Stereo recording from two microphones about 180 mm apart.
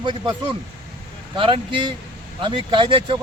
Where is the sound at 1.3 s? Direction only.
25° right (ahead or behind).